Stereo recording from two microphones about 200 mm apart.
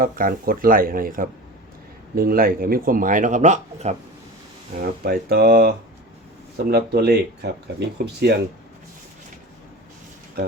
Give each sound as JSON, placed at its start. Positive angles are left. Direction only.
{"t": 0.0, "sound": "speech", "side_deg": -45}
{"t": 4.8, "sound": "speech", "side_deg": -50}